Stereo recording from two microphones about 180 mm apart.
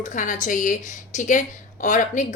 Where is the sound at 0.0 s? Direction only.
45° left (ahead or behind).